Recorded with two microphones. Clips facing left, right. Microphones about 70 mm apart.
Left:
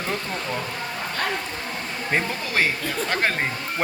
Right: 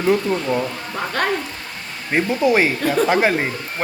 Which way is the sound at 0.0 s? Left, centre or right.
Centre.